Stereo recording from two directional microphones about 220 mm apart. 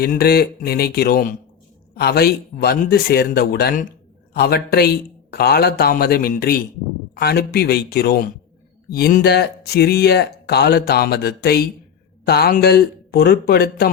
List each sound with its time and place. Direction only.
0.0 s speech: 45° left (ahead or behind)